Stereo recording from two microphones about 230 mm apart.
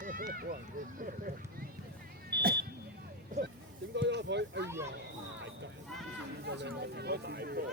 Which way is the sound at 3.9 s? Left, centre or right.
Right.